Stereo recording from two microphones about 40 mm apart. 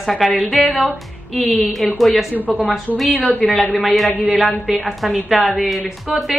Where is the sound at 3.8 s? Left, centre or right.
Centre.